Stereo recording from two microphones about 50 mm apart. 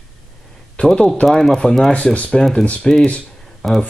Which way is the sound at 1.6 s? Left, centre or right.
Left.